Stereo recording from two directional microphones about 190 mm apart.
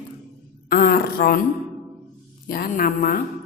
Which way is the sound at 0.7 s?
50° left (ahead or behind).